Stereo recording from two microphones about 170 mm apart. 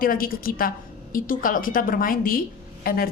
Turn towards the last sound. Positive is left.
turn(degrees=60)  # may be behind; listen again after turning